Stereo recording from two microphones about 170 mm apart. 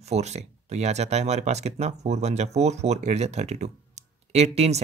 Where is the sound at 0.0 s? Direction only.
40° right (ahead or behind).